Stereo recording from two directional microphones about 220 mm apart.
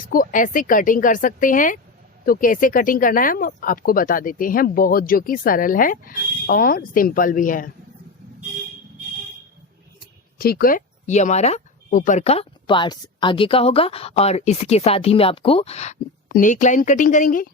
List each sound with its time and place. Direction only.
0.1 s speech: 40° left (ahead or behind)
10.3 s speech: 40° left (ahead or behind)